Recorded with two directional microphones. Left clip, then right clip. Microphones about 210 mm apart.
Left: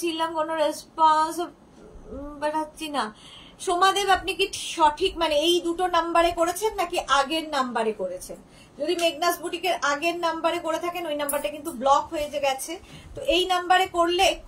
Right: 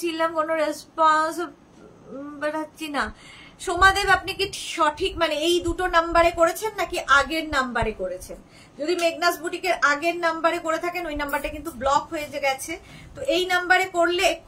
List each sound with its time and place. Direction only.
0.0 s female singing: 15° right (ahead or behind)
3.6 s a woman's voice: 20° right (ahead or behind)